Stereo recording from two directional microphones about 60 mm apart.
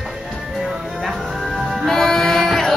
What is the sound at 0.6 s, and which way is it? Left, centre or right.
Music, centre.